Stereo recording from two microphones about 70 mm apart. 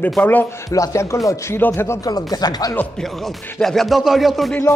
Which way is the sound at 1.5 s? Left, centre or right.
Left.